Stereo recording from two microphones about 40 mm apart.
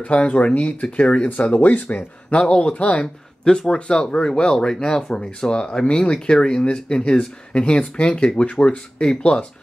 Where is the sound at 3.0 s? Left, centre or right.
Left.